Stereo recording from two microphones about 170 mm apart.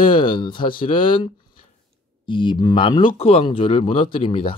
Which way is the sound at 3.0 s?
35° left (ahead or behind).